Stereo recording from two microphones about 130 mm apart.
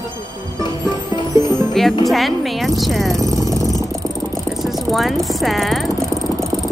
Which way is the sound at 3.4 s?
25° right (ahead or behind).